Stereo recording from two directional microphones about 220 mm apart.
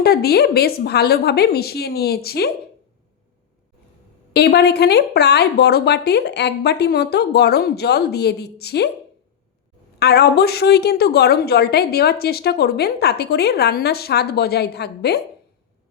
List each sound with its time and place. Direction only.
0.0 s a woman's voice: 45° left (ahead or behind)
4.3 s a woman's voice: 50° left (ahead or behind)
10.0 s a woman's voice: 45° left (ahead or behind)